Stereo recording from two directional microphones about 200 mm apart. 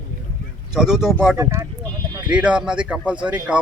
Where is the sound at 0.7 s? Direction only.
Centre (ahead or behind).